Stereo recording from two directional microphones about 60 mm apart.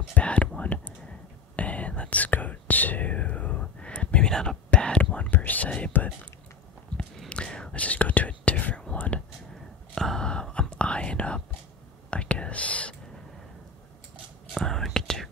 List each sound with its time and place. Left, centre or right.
0.1 s whispering: left
0.6 s a sound: left
1.6 s whispering: left
7.2 s whispering: centre
9.9 s whispering: centre
14.5 s whispering: centre